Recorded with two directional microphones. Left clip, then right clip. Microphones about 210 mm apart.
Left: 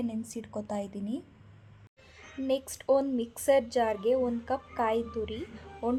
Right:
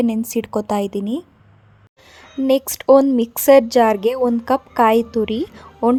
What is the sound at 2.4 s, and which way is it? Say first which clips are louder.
Speech: right 14 dB; 35° right (ahead or behind).